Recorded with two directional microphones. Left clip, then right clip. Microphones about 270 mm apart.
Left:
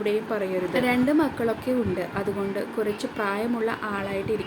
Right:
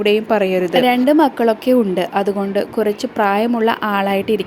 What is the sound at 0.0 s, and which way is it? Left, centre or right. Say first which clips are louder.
A woman's voice: right 11 dB; right.